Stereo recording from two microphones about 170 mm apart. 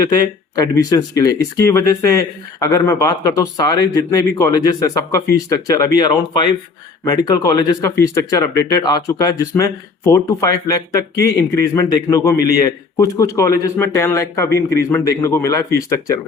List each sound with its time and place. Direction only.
0.5 s speech: 20° left (ahead or behind)
7.0 s a man's voice: 25° left (ahead or behind)